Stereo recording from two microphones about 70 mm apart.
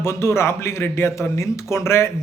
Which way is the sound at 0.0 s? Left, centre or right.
Left.